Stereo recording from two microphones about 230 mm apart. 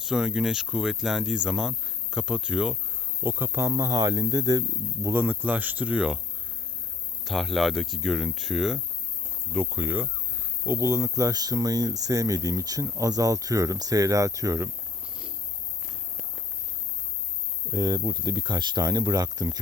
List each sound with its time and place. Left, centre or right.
0.0 s speech: centre
7.3 s speech: centre
15.9 s walk: centre
17.7 s speech: centre